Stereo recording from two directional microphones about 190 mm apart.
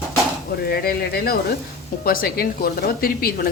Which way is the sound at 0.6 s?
55° left (ahead or behind).